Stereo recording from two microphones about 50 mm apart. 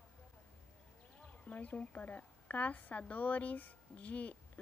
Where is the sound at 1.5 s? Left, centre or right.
Left.